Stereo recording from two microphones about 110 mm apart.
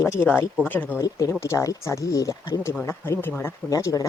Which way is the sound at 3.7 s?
30° left (ahead or behind).